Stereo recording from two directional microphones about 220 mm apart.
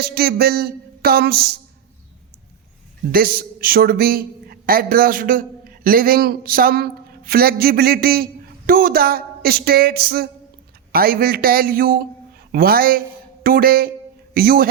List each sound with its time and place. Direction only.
0.0 s speech: 45° right (ahead or behind)
3.1 s speech: 45° right (ahead or behind)